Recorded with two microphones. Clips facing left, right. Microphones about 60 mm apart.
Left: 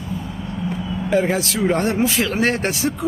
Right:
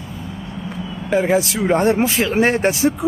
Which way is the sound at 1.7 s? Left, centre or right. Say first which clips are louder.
Right 5 dB; right.